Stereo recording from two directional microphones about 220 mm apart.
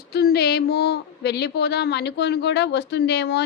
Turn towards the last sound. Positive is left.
turn(degrees=50)  # may be behind; listen again after turning